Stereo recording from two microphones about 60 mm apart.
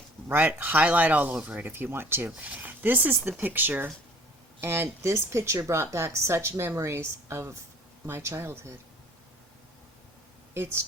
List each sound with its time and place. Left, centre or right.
0.3 s speech: right
1.7 s speech: right
2.4 s speech: right
4.6 s a woman's voice: right
10.5 s a woman's voice: right